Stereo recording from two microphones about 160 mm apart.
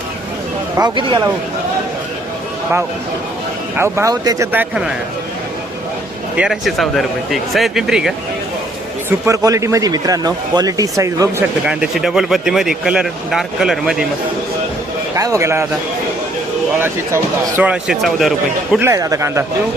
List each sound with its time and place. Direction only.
0.8 s speech: 30° right (ahead or behind)
3.8 s speech: 15° right (ahead or behind)
4.5 s speech: 5° right (ahead or behind)
6.3 s speech: 5° right (ahead or behind)
9.0 s speech: 20° right (ahead or behind)
11.6 s speech: 5° right (ahead or behind)
15.1 s speech: 20° right (ahead or behind)
16.7 s speech: 15° right (ahead or behind)
17.7 s speech: centre (ahead or behind)
18.8 s speech: 20° right (ahead or behind)